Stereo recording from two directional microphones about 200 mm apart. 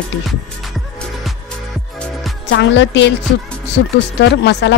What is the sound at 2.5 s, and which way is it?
Speech, 65° left (ahead or behind).